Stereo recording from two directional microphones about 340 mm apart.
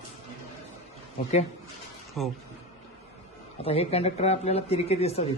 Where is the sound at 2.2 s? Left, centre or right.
Centre.